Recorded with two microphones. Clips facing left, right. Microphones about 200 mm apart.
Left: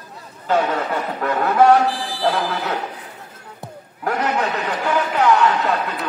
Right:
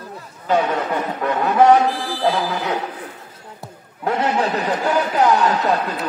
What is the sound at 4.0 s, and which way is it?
A man's voice, 25° right (ahead or behind).